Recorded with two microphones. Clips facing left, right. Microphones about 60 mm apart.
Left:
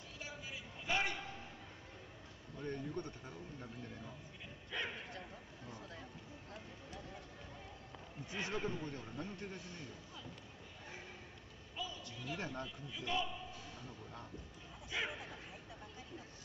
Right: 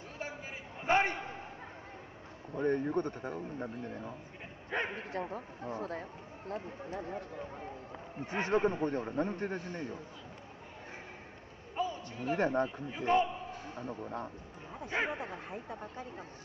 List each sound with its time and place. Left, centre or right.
0.8 s a sound: right
2.5 s a man's voice: right
11.7 s a man's voice: right